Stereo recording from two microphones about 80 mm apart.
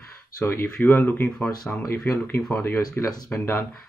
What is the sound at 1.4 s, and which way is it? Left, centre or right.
Speech, centre.